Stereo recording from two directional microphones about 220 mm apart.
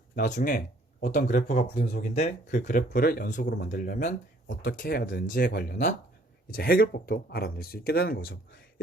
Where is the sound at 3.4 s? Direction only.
50° left (ahead or behind).